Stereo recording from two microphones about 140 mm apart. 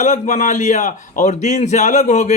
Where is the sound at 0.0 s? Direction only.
60° left (ahead or behind).